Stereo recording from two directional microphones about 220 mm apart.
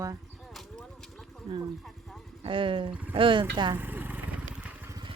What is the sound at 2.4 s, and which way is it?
Speech, 25° right (ahead or behind).